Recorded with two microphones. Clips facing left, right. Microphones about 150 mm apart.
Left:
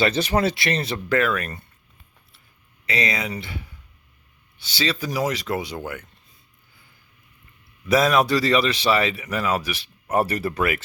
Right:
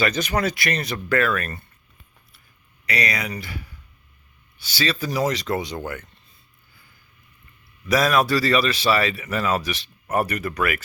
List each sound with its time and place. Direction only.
0.0 s speech: 30° left (ahead or behind)
2.8 s speech: 25° left (ahead or behind)
7.9 s speech: 20° left (ahead or behind)
10.2 s speech: 30° left (ahead or behind)